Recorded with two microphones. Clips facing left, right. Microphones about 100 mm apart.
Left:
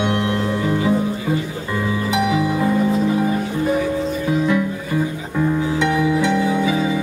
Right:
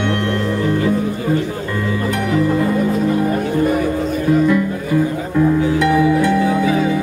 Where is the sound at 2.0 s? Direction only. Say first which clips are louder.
Even; 5° left (ahead or behind).